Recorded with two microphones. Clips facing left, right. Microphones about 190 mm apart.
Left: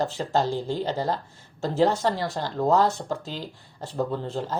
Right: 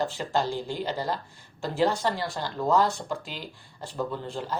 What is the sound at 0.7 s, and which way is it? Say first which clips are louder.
Speech: left 3 dB; 25° left (ahead or behind).